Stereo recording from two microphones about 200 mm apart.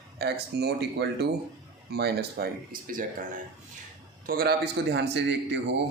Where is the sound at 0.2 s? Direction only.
55° right (ahead or behind).